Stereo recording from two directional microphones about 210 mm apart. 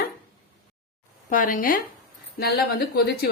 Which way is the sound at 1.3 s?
40° left (ahead or behind).